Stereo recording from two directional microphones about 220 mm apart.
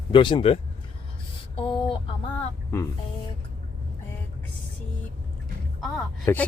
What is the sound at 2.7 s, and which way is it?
Speech, 10° left (ahead or behind).